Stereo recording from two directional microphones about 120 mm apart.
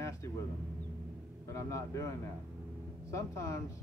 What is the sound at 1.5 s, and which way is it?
Speech, 25° left (ahead or behind).